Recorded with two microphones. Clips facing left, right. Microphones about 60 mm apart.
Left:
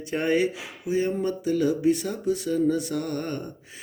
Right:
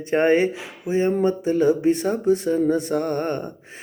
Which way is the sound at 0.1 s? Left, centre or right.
Right.